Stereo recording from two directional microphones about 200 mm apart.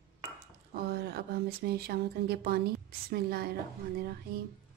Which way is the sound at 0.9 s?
50° right (ahead or behind).